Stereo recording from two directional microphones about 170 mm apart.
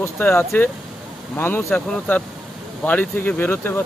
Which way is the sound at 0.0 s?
15° left (ahead or behind).